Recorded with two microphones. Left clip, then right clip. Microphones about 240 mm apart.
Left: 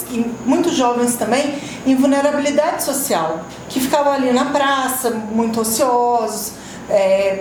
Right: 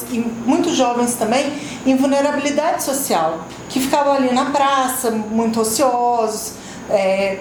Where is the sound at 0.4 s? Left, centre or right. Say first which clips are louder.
Even; right.